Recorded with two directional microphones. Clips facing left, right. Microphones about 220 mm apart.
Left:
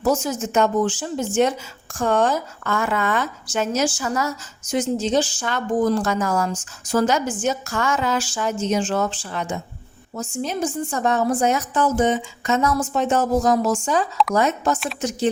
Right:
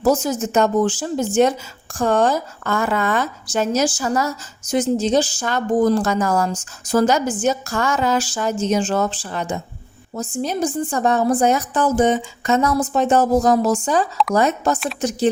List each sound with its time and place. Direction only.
0.0 s speech: 35° right (ahead or behind)